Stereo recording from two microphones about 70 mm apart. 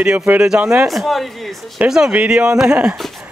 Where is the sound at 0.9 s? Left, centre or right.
Centre.